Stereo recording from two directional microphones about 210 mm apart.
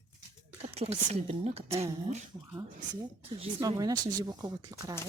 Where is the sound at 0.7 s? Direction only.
30° right (ahead or behind).